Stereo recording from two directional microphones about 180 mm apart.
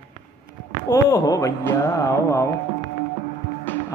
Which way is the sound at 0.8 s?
20° left (ahead or behind).